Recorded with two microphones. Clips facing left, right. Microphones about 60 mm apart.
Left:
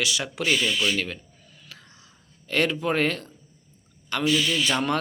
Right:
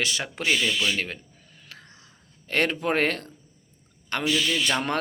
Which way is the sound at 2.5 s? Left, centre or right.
Right.